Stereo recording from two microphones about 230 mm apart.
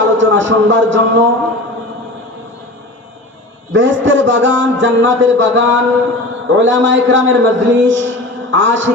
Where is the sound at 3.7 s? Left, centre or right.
Right.